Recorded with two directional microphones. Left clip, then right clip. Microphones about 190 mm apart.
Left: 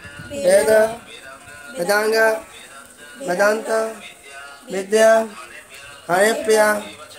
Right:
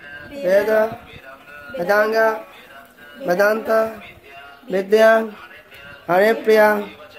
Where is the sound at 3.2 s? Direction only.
40° right (ahead or behind).